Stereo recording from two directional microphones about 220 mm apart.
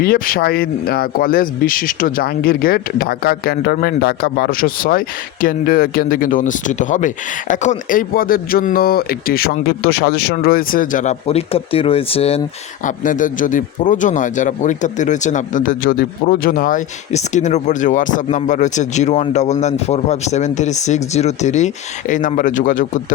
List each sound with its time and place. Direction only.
0.0 s speech: 40° left (ahead or behind)